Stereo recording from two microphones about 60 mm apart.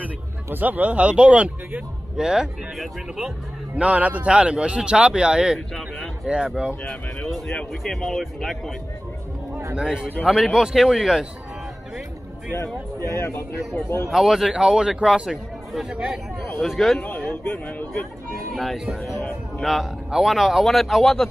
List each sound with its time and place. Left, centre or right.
0.0 s speech: right
2.1 s a man's voice: centre
7.8 s a man's voice: centre
9.8 s speech: centre
13.1 s a man's voice: left
14.0 s a man's voice: centre
17.0 s a sound: left
18.5 s a man's voice: centre